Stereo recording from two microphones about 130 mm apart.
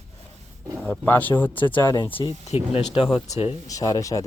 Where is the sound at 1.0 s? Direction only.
15° left (ahead or behind).